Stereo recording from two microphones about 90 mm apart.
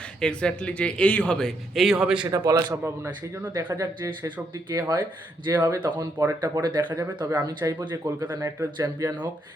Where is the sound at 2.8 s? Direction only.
25° right (ahead or behind).